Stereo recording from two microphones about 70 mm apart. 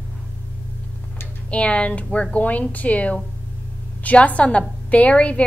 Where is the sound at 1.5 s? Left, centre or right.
Centre.